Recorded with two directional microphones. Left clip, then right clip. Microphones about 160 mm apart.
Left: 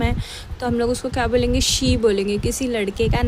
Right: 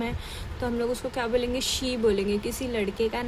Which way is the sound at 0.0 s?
40° left (ahead or behind).